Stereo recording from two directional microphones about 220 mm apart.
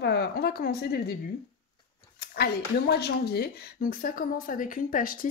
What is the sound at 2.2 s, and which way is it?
Speech, 45° left (ahead or behind).